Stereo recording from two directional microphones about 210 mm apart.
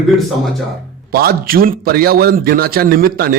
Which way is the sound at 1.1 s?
45° right (ahead or behind).